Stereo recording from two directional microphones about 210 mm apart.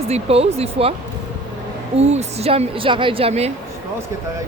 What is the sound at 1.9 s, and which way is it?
Speech, 30° right (ahead or behind).